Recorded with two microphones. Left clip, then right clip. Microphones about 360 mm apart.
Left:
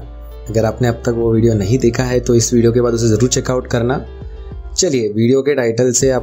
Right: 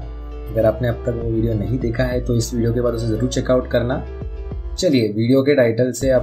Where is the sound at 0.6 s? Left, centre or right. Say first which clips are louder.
Left 1 dB; left.